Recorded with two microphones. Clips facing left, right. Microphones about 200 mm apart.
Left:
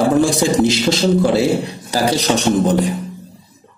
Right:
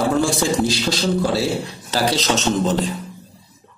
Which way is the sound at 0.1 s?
20° left (ahead or behind).